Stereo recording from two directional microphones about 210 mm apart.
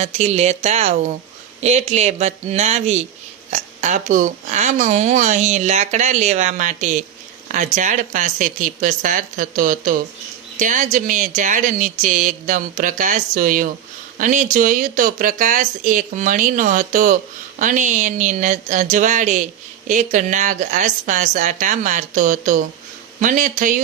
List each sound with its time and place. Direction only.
0.0 s speech: 30° right (ahead or behind)